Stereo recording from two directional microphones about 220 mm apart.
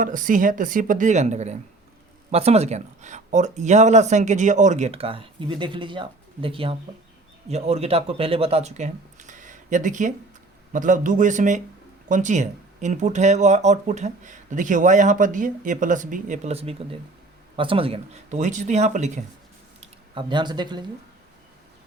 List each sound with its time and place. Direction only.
0.0 s speech: 35° right (ahead or behind); by 20.8 s 20° right (ahead or behind)